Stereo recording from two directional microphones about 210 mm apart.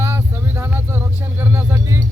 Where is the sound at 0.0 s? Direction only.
10° right (ahead or behind).